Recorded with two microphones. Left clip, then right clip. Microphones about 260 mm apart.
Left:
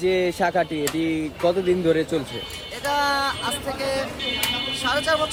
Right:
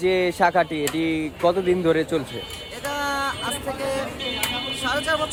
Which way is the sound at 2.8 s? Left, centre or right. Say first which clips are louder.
Left 4 dB; centre.